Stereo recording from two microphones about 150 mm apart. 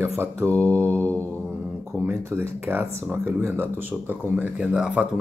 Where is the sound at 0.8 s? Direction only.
10° left (ahead or behind).